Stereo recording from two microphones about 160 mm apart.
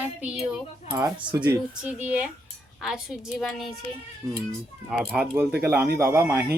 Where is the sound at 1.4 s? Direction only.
10° right (ahead or behind).